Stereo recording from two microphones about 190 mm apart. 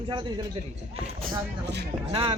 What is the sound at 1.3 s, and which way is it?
Speech, 65° right (ahead or behind).